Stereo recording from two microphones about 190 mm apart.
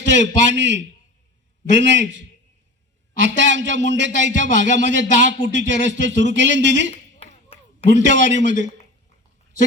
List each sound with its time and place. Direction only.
0.1 s a man's voice: 70° right (ahead or behind)
6.9 s a sound: 30° left (ahead or behind)
7.9 s a man's voice: 70° right (ahead or behind)